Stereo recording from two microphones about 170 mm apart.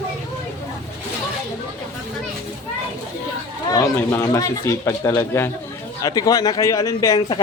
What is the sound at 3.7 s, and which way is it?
Speech, 15° left (ahead or behind).